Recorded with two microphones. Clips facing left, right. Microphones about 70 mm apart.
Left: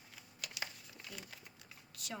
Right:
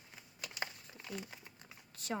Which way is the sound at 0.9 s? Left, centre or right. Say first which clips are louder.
Right 5 dB; right.